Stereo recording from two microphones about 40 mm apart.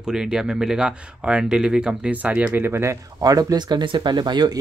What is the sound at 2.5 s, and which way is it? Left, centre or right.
Speech, right.